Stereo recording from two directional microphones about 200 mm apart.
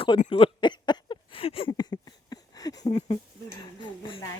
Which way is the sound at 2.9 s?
30° left (ahead or behind).